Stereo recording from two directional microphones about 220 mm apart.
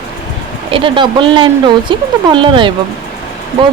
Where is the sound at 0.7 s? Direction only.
20° right (ahead or behind).